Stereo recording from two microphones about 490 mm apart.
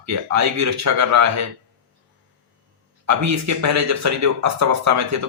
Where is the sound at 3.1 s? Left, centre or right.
Right.